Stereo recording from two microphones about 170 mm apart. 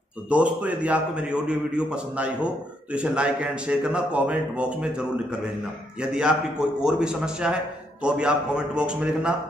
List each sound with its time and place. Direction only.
0.3 s a man's voice: 5° right (ahead or behind)